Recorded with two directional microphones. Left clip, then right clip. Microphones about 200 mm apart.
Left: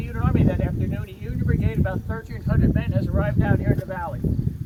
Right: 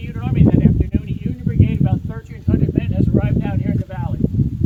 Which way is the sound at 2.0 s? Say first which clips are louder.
Right 6 dB; 15° right (ahead or behind).